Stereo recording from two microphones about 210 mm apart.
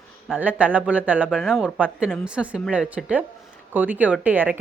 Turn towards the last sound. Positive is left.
turn(degrees=-10)  # may be behind; listen again after turning